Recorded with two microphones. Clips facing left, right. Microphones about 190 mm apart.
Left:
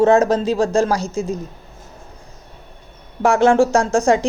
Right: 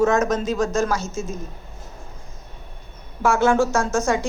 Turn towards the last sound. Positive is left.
turn(degrees=30)  # may be behind; listen again after turning